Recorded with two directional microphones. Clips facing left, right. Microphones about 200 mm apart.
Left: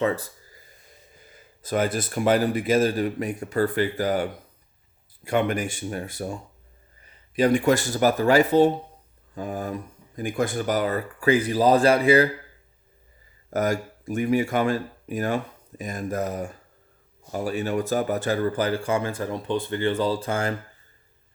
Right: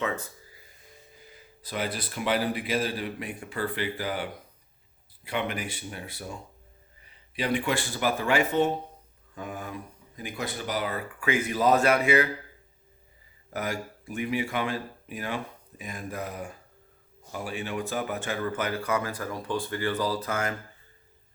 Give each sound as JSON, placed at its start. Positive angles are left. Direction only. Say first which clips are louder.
{"t": 1.6, "sound": "speech", "louder": "left 8 dB", "side_deg": 45}
{"t": 7.3, "sound": "speech", "louder": "left 8 dB", "side_deg": 45}
{"t": 13.5, "sound": "speech", "louder": "left 8 dB", "side_deg": 45}